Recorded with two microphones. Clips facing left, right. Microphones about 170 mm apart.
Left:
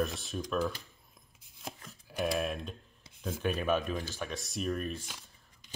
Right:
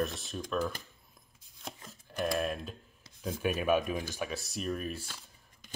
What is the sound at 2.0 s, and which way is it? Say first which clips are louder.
Speech: even; centre (ahead or behind).